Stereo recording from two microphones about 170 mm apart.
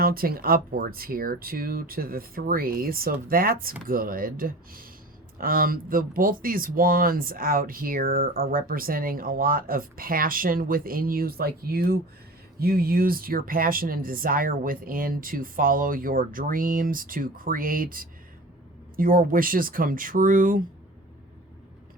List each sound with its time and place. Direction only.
0.0 s speech: 60° right (ahead or behind)